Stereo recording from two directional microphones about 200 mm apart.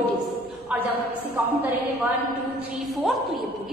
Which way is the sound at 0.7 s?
5° right (ahead or behind).